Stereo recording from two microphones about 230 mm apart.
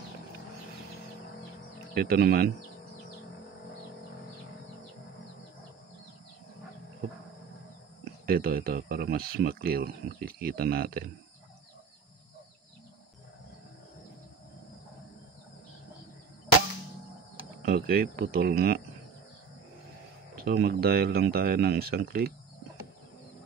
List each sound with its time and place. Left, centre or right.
2.0 s speech: right
8.0 s speech: right
17.6 s speech: right
20.4 s speech: right